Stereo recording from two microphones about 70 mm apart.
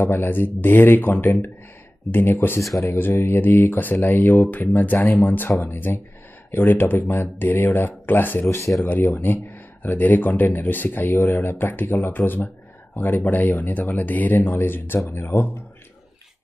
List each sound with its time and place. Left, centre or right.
0.0 s speech: left